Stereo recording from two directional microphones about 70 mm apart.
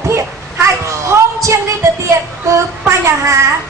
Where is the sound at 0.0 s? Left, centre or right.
Right.